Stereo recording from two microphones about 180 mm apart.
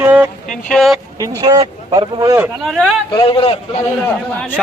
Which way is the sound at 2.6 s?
Centre (ahead or behind).